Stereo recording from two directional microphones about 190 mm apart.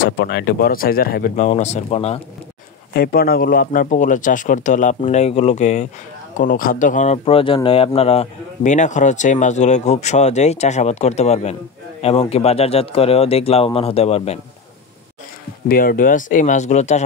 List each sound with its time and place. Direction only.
0.2 s speech: 60° left (ahead or behind); by 2.2 s 35° left (ahead or behind)
2.9 s speech: 50° left (ahead or behind); by 14.4 s 35° left (ahead or behind)
15.7 s speech: 50° left (ahead or behind)